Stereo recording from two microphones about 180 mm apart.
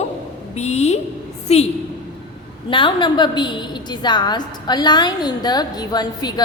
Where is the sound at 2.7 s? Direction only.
25° left (ahead or behind).